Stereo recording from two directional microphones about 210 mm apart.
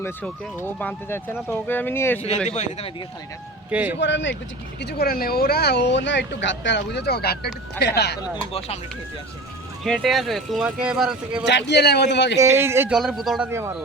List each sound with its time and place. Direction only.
0.0 s speech: 10° left (ahead or behind)
2.5 s speech: 30° left (ahead or behind)
3.7 s speech: 5° right (ahead or behind)
4.0 s speech: 60° left (ahead or behind)
8.5 s speech: 30° left (ahead or behind)
9.8 s speech: centre (ahead or behind)
11.4 s speech: 55° left (ahead or behind)
12.4 s speech: 10° right (ahead or behind)
13.0 s speech: centre (ahead or behind)
13.5 s speech: 10° right (ahead or behind)